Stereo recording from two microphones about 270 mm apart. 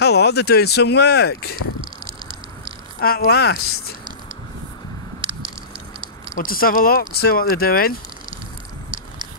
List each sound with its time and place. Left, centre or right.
0.0 s speech: left
3.0 s speech: left
5.2 s squish: centre
6.3 s speech: left